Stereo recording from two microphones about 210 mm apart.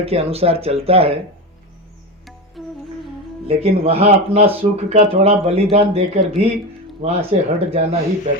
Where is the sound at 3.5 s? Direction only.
30° right (ahead or behind).